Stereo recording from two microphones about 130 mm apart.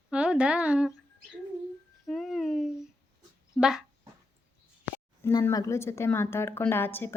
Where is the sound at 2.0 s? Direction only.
Centre (ahead or behind).